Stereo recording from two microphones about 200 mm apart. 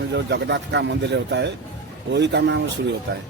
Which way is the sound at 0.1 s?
60° right (ahead or behind).